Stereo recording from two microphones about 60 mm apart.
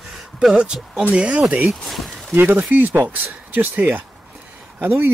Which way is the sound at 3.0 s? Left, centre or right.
Right.